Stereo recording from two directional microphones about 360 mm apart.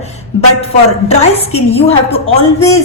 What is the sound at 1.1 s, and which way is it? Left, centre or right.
A woman's voice, centre.